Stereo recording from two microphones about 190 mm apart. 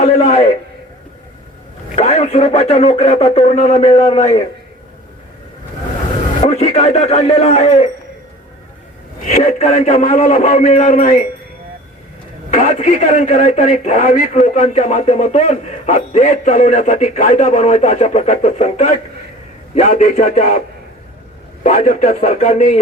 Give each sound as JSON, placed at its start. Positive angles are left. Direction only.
{"t": 0.0, "sound": "a man's voice", "side_deg": 35}
{"t": 2.0, "sound": "speech", "side_deg": 35}
{"t": 6.4, "sound": "speech", "side_deg": 35}
{"t": 9.2, "sound": "speech", "side_deg": 35}
{"t": 12.5, "sound": "speech", "side_deg": 40}
{"t": 21.6, "sound": "speech", "side_deg": 40}